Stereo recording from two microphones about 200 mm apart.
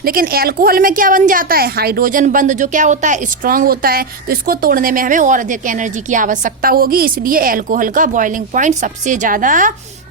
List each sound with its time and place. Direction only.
0.0 s a woman's voice: 45° right (ahead or behind)